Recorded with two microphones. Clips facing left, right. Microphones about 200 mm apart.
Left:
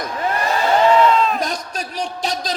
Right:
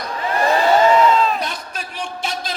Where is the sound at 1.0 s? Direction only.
Centre (ahead or behind).